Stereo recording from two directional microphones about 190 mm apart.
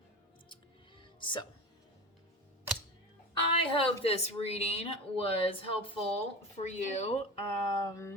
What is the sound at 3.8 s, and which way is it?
Speech, 30° left (ahead or behind).